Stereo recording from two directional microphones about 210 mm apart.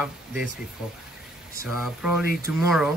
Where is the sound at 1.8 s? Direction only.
5° right (ahead or behind).